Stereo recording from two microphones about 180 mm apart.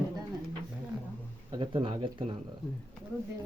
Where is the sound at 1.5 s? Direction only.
25° right (ahead or behind).